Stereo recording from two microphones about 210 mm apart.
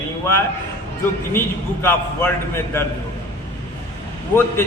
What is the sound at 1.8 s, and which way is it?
A man's voice, 10° left (ahead or behind).